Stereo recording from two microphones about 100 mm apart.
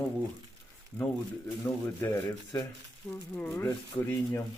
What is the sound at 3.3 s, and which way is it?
Speech, 20° left (ahead or behind).